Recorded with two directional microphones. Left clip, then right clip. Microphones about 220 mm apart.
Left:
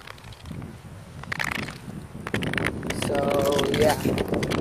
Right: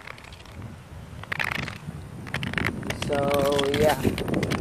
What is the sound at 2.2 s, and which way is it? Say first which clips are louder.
Vehicle: left 2 dB; 5° left (ahead or behind).